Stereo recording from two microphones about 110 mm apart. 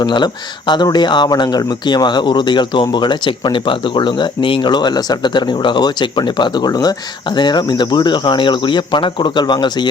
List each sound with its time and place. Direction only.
0.0 s speech: 45° left (ahead or behind)